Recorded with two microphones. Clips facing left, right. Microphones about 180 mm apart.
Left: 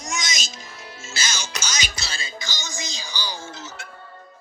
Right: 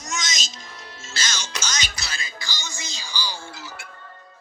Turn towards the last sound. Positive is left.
turn(degrees=15)  # may be behind; listen again after turning